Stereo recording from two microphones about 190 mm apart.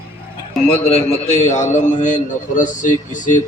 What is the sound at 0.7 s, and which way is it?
A man's voice, 30° left (ahead or behind).